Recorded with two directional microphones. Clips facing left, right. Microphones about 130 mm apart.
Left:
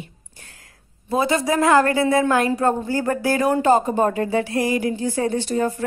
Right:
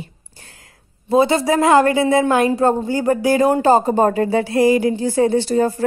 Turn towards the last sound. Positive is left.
turn(degrees=-30)  # may be behind; listen again after turning